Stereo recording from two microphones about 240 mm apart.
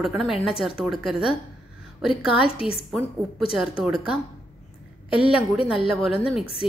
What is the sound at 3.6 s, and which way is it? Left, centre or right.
Speech, centre.